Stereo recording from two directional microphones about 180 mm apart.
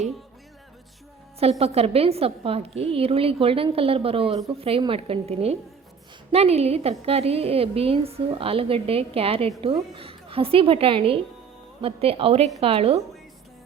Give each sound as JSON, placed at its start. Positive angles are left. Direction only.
{"t": 1.4, "sound": "a woman's voice", "side_deg": -35}